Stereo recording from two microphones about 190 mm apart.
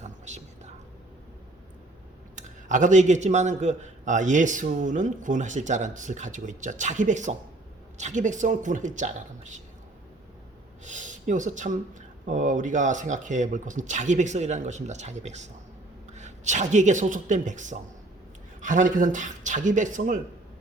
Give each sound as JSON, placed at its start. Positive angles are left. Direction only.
{"t": 0.0, "sound": "whispering", "side_deg": -40}
{"t": 2.3, "sound": "a man's voice", "side_deg": -40}
{"t": 10.8, "sound": "a man's voice", "side_deg": -40}